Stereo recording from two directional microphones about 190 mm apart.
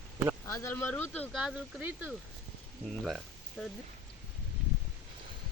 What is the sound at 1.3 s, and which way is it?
Speech, 5° right (ahead or behind).